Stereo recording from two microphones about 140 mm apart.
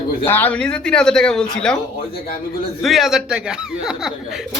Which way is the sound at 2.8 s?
Centre (ahead or behind).